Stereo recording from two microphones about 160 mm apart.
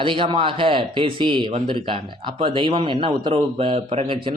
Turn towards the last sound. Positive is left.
turn(degrees=-35)  # may be behind; listen again after turning